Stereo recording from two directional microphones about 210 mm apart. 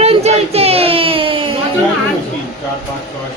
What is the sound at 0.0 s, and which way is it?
Child singing, 30° right (ahead or behind).